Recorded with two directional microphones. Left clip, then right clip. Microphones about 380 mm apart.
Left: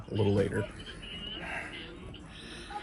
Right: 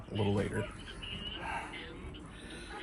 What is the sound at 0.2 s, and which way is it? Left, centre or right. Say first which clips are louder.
Speech: left 5 dB; centre.